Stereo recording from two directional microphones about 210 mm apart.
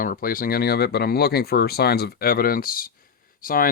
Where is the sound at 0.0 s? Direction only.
45° left (ahead or behind).